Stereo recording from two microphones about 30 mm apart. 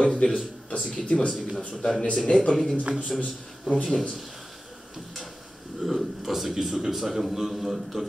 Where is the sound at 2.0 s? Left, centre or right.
Left.